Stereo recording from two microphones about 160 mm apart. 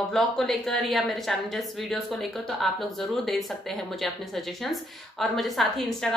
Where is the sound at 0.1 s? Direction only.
Centre (ahead or behind).